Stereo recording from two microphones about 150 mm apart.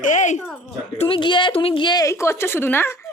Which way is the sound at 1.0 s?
35° left (ahead or behind).